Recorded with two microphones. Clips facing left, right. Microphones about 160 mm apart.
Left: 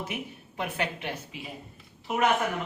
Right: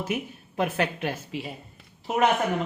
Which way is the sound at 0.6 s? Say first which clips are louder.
Right 6 dB; 45° right (ahead or behind).